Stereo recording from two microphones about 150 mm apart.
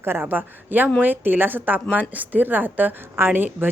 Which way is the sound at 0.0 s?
15° right (ahead or behind).